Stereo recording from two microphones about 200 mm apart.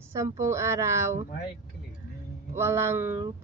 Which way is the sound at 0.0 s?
15° right (ahead or behind).